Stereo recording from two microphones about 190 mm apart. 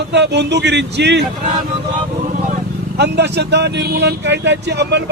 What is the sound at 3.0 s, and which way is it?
Speech, 65° right (ahead or behind).